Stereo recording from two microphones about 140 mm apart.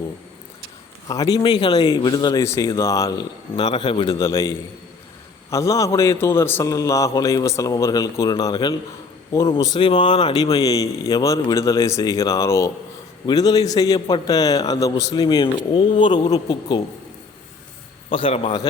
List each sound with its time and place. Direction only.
1.0 s a man's voice: 25° left (ahead or behind)
3.5 s a man's voice: 35° left (ahead or behind)
4.2 s a man's voice: 20° left (ahead or behind)
18.1 s a man's voice: 40° left (ahead or behind)